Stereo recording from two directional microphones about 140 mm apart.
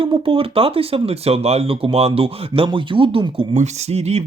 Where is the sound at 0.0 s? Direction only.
40° right (ahead or behind).